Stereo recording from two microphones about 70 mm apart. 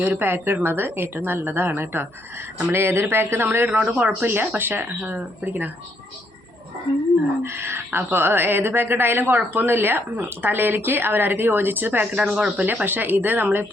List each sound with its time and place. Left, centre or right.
0.0 s speech: right
3.7 s speech: right
7.4 s speech: right
12.1 s speech: centre
12.6 s speech: right